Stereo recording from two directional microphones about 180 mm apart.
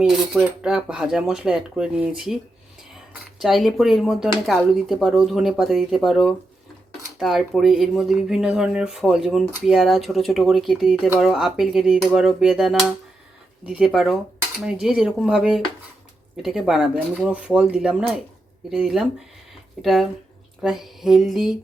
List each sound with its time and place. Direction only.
0.0 s speech: 5° right (ahead or behind)
3.4 s speech: centre (ahead or behind)